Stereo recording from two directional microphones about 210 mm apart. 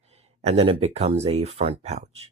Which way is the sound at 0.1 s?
30° right (ahead or behind).